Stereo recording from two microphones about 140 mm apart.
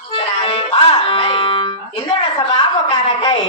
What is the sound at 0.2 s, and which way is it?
Music, 45° left (ahead or behind).